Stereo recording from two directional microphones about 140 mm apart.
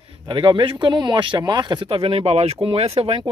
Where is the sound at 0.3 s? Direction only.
35° right (ahead or behind).